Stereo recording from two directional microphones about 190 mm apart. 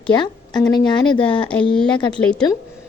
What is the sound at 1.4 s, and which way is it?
Speech, 5° left (ahead or behind).